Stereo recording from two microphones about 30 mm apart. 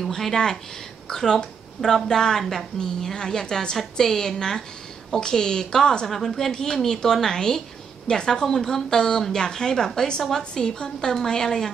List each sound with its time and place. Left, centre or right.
0.0 s a woman's voice: centre
4.0 s a woman's voice: centre